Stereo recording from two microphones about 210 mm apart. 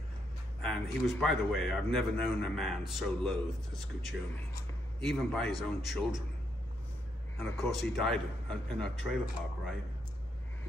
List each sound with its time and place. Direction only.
0.6 s a man's voice: centre (ahead or behind)
7.3 s a man's voice: centre (ahead or behind)